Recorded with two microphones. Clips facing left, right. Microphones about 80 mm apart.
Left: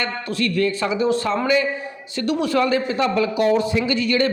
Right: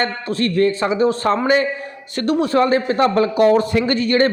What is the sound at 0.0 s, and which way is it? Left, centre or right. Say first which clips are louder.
A man's voice: right 4 dB; right.